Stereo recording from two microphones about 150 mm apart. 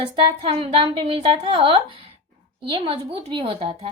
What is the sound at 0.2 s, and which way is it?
A woman's voice, 40° right (ahead or behind).